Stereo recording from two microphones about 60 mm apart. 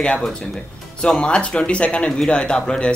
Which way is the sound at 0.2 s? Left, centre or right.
Centre.